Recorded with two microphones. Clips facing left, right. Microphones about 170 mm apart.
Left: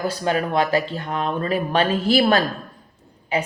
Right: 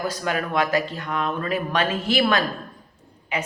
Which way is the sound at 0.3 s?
30° left (ahead or behind).